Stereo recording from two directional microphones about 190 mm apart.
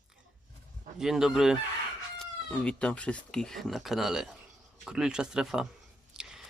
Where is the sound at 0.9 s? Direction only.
Centre (ahead or behind).